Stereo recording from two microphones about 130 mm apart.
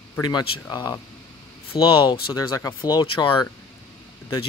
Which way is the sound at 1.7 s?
40° left (ahead or behind).